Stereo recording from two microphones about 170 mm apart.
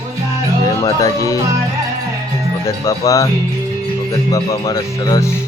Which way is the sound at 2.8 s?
20° left (ahead or behind).